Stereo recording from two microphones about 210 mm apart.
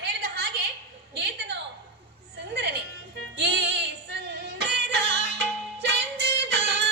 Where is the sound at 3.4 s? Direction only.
50° right (ahead or behind).